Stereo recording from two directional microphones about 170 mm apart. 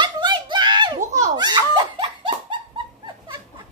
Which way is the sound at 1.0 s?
45° right (ahead or behind).